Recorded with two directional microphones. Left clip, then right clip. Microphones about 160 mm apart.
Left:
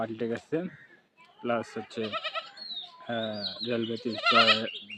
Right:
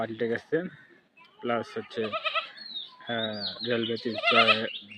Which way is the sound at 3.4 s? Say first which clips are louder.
Right 2 dB; 5° left (ahead or behind).